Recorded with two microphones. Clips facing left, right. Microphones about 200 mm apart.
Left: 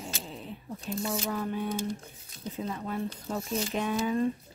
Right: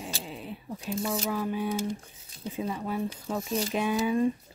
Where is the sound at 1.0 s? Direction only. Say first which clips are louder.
Right 2 dB; 5° right (ahead or behind).